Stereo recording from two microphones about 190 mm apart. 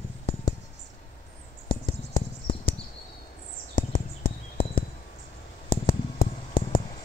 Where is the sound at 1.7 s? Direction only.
25° left (ahead or behind).